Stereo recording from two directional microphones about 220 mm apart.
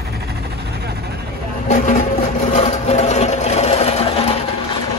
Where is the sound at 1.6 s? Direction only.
35° left (ahead or behind).